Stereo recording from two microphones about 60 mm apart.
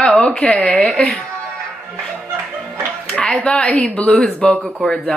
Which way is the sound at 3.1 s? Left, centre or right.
Centre.